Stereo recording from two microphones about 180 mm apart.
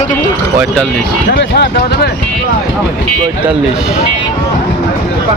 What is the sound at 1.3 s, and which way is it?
Speech, 70° left (ahead or behind).